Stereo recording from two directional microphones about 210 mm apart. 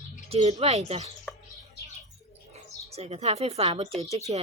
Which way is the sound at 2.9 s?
30° right (ahead or behind).